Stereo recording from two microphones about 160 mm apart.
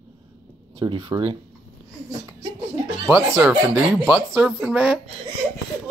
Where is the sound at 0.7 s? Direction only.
30° right (ahead or behind).